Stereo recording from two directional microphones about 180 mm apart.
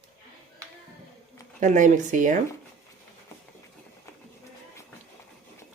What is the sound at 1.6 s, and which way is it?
Speech, 45° right (ahead or behind).